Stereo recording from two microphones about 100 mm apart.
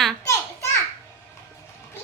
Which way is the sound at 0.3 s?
30° left (ahead or behind).